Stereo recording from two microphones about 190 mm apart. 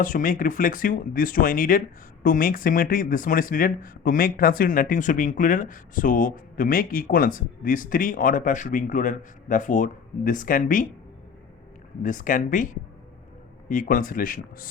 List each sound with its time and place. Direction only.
0.0 s speech: 45° left (ahead or behind)
12.0 s speech: 45° left (ahead or behind)